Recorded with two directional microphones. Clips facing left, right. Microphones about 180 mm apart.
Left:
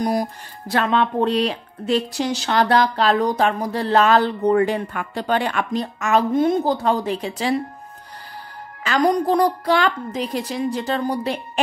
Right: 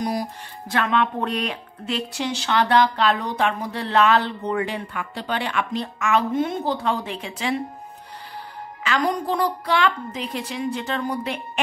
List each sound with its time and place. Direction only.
0.0 s speech: 45° left (ahead or behind)
8.8 s speech: 40° left (ahead or behind)